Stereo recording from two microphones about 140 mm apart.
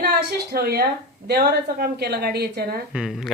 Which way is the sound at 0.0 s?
90° right.